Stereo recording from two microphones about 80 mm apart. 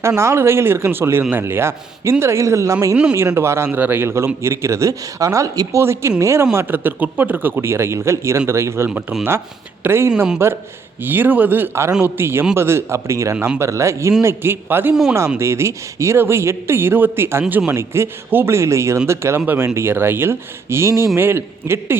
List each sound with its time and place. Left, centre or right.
0.2 s speech: right
2.9 s speech: centre
3.2 s speech: right
3.7 s speech: right